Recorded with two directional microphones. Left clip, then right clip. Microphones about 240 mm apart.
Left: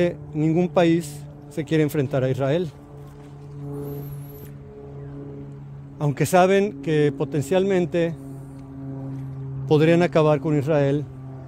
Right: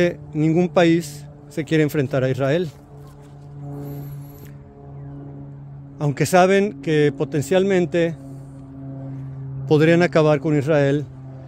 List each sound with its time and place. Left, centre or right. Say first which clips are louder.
0.0 s speech: right 3 dB; centre
3.8 s vehicle: left 2 dB; centre
5.9 s speech: right 2 dB; centre
9.7 s speech: right 2 dB; centre